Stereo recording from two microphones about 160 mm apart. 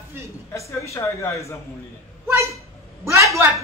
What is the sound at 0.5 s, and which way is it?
Speech, 20° left (ahead or behind).